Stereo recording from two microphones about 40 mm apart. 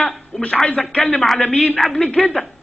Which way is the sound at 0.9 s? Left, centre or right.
Left.